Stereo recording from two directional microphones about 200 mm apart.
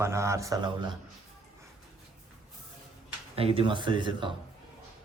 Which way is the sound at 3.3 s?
30° right (ahead or behind).